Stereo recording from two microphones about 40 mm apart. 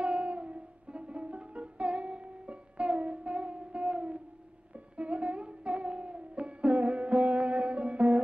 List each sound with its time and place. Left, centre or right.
0.0 s music: right